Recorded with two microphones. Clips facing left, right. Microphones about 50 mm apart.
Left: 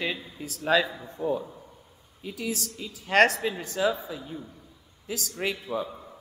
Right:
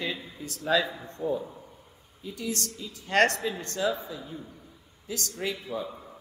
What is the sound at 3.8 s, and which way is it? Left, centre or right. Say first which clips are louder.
Speech: left 3 dB; centre.